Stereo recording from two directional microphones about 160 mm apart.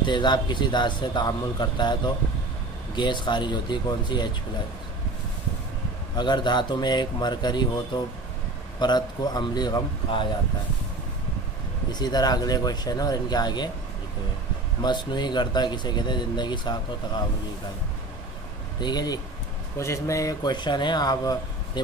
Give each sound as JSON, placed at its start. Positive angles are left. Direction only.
{"t": 0.0, "sound": "speech", "side_deg": 30}
{"t": 6.1, "sound": "speech", "side_deg": 25}
{"t": 11.9, "sound": "speech", "side_deg": 25}
{"t": 14.8, "sound": "speech", "side_deg": 25}
{"t": 18.8, "sound": "speech", "side_deg": 25}